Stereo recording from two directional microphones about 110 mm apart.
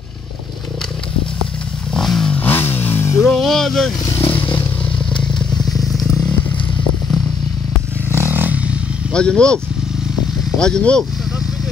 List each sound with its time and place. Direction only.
2.0 s vehicle: 5° left (ahead or behind)
2.3 s vehicle: 20° left (ahead or behind)
3.3 s music: 5° left (ahead or behind)
5.1 s motorcycle: centre (ahead or behind)
8.1 s vehicle: 20° right (ahead or behind)
9.1 s speech: 10° left (ahead or behind)
10.6 s speech: 10° left (ahead or behind)